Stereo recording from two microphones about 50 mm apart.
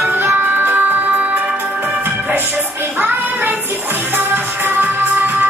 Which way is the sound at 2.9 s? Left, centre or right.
Right.